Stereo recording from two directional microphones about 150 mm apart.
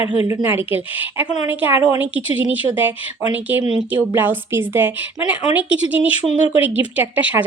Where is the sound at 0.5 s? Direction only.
10° right (ahead or behind).